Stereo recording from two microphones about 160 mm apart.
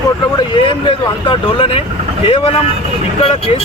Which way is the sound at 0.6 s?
30° left (ahead or behind).